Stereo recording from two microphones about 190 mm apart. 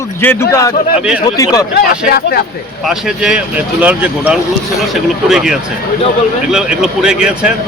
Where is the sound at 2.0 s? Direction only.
55° left (ahead or behind).